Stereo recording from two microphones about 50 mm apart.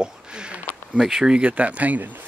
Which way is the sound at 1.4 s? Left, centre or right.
Right.